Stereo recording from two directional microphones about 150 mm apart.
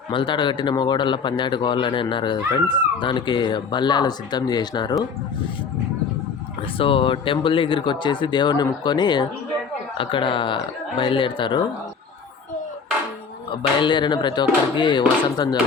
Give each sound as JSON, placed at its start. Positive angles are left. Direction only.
{"t": 0.1, "sound": "speech", "side_deg": 35}
{"t": 6.7, "sound": "speech", "side_deg": 35}
{"t": 13.6, "sound": "speech", "side_deg": 30}